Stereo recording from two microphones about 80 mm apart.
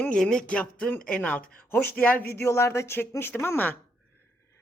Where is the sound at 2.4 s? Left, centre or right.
Left.